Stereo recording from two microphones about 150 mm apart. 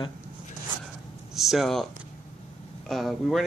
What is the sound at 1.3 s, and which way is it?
Speech, centre (ahead or behind).